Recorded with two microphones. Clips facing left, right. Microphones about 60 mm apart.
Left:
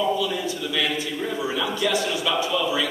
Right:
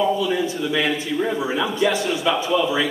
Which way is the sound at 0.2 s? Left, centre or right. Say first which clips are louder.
Right 4 dB; right.